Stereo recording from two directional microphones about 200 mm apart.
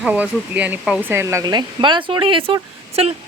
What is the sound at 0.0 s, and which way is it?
Speech, 5° right (ahead or behind).